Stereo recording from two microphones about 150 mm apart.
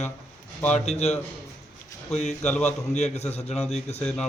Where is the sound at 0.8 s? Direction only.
45° left (ahead or behind).